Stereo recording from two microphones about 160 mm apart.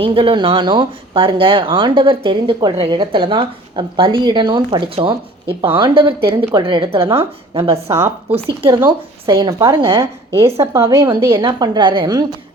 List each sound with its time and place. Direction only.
0.0 s speech: 35° right (ahead or behind)
7.9 s a woman's voice: 15° right (ahead or behind)
8.9 s a woman's voice: 25° right (ahead or behind)